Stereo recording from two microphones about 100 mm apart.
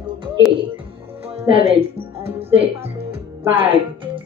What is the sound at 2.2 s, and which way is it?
Speech, 75° right (ahead or behind).